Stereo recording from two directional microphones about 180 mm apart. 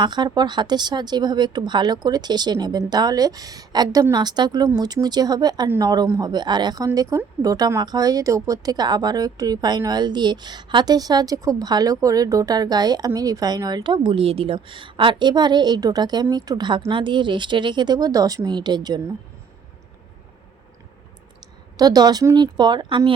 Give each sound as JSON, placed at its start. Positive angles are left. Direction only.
{"t": 0.0, "sound": "speech", "side_deg": -25}
{"t": 21.8, "sound": "speech", "side_deg": -20}